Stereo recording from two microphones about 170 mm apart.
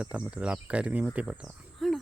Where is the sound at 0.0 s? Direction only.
5° right (ahead or behind).